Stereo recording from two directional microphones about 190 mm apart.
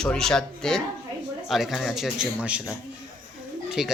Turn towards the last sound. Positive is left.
turn(degrees=-5)  # may be behind; listen again after turning